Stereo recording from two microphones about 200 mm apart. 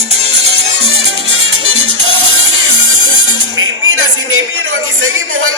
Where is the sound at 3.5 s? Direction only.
85° right.